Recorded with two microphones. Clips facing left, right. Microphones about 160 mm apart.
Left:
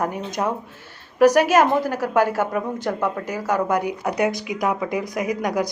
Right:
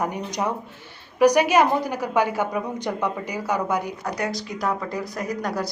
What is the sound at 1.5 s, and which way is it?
Speech, 15° right (ahead or behind).